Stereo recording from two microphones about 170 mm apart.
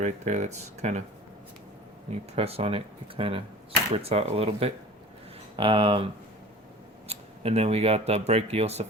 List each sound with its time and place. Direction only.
0.0 s speech: 45° right (ahead or behind)
2.3 s speech: 35° right (ahead or behind)
7.1 s speech: 35° right (ahead or behind)